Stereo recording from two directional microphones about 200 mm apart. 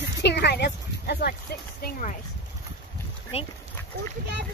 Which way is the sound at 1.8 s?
40° left (ahead or behind).